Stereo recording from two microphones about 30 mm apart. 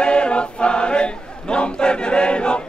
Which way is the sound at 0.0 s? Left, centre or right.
Left.